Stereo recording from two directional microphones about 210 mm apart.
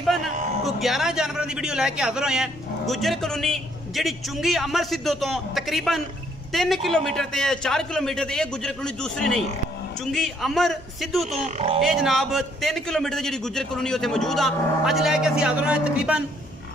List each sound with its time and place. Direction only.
0.0 s a man's voice: centre (ahead or behind)
11.4 s speech: 30° right (ahead or behind)
11.8 s a man's voice: centre (ahead or behind)